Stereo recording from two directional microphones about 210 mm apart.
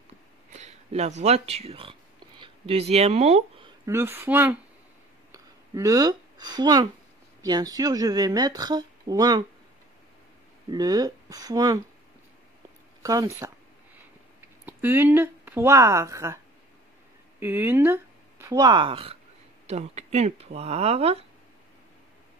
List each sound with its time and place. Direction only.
0.5 s speech: 35° right (ahead or behind)
3.8 s a woman's voice: 10° right (ahead or behind)
5.3 s a sound: 15° right (ahead or behind)
7.4 s a woman's voice: 20° right (ahead or behind)
10.7 s a woman's voice: 20° right (ahead or behind)
13.0 s a woman's voice: 15° right (ahead or behind)
14.7 s speech: 10° right (ahead or behind)
17.4 s speech: 10° right (ahead or behind); by 21.3 s 30° right (ahead or behind)